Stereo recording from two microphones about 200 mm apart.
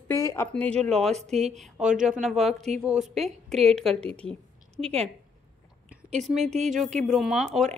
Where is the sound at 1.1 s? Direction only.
35° right (ahead or behind).